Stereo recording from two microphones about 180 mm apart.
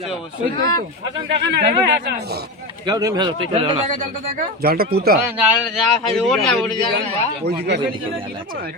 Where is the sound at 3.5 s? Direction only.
35° right (ahead or behind).